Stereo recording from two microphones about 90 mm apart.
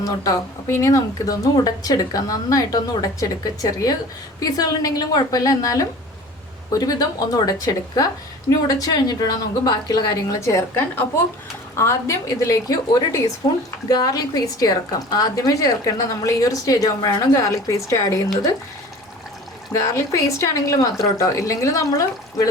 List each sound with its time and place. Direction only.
0.0 s a woman's voice: 40° left (ahead or behind)
10.8 s speech: 20° left (ahead or behind)
11.8 s a woman's voice: 30° left (ahead or behind)
19.7 s a woman's voice: 35° left (ahead or behind)